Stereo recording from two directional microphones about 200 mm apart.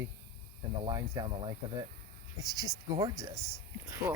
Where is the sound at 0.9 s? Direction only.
20° right (ahead or behind).